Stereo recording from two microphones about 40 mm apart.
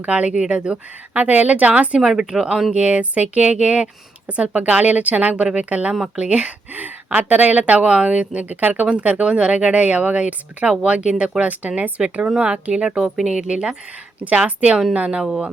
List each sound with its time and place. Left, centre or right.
0.0 s speech: right
1.2 s speech: right
2.0 s speech: centre
2.7 s speech: right
9.2 s speech: right
9.8 s speech: right
12.0 s speech: centre
14.2 s speech: right